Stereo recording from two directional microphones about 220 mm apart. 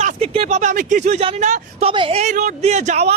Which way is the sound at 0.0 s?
30° right (ahead or behind).